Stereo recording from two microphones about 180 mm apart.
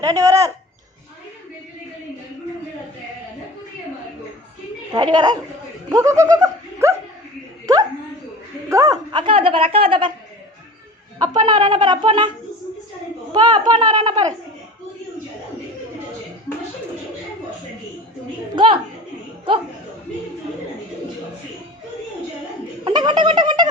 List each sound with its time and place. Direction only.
0.0 s speech: 20° right (ahead or behind)
5.1 s speech: 25° right (ahead or behind)
5.9 s goat: 20° right (ahead or behind)
7.7 s a sound: 20° right (ahead or behind)
8.7 s speech: 20° right (ahead or behind)
11.2 s speech: 25° right (ahead or behind)
13.3 s speech: 25° right (ahead or behind)
18.5 s speech: 25° right (ahead or behind)
22.8 s a sound: 25° right (ahead or behind)